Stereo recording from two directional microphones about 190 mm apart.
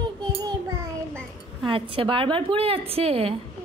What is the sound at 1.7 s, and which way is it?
A woman's voice, 30° right (ahead or behind).